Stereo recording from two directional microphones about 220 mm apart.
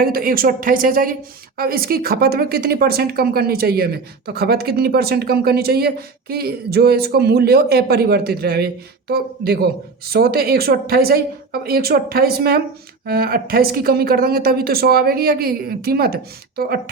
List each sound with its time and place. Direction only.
0.0 s speech: 45° right (ahead or behind)